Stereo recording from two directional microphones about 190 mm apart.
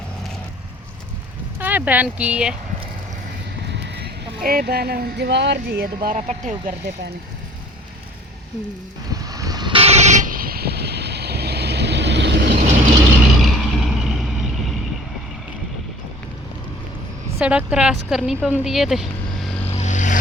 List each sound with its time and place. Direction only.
1.5 s speech: 10° right (ahead or behind)
3.6 s speech: 65° right (ahead or behind)
5.8 s speech: 50° right (ahead or behind)
6.1 s speech: 35° right (ahead or behind)
9.1 s vehicle: 20° right (ahead or behind); by 12.5 s 65° right (ahead or behind)
13.4 s vehicle: centre (ahead or behind)
17.3 s a woman's voice: 10° right (ahead or behind)
19.7 s vehicle: 40° left (ahead or behind)